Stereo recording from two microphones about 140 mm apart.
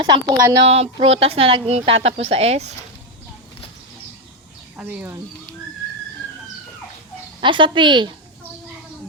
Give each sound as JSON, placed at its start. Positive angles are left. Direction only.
{"t": 0.0, "sound": "a woman's voice", "side_deg": -35}
{"t": 0.6, "sound": "a woman's voice", "side_deg": -45}
{"t": 4.8, "sound": "speech", "side_deg": -10}
{"t": 7.4, "sound": "a woman's voice", "side_deg": -35}